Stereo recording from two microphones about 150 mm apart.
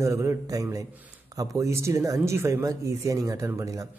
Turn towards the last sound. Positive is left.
turn(degrees=-20)  # may be behind; listen again after turning